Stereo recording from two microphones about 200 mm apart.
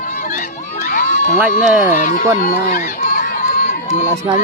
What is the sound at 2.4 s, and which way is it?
Run, 40° left (ahead or behind).